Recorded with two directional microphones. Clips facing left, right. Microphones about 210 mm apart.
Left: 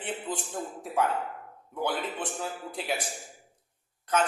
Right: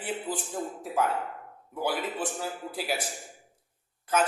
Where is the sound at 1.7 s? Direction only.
5° right (ahead or behind).